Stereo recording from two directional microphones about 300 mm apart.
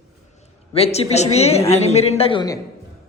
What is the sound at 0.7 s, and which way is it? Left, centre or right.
Speech, centre.